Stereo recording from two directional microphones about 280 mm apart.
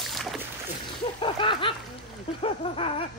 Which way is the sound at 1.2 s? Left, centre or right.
Centre.